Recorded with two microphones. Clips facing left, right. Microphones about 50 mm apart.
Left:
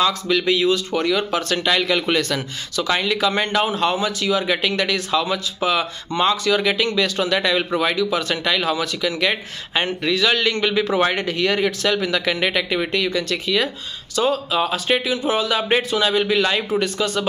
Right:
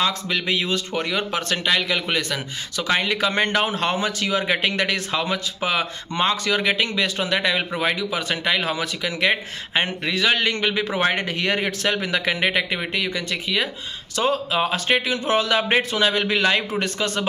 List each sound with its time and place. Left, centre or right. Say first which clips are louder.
0.0 s speech: left 4 dB; right
1.7 s speech: left 3 dB; centre
2.7 s speech: left 1 dB; right
14.1 s speech: left 2 dB; right